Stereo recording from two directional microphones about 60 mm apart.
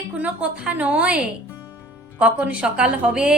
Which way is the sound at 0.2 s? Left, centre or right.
Right.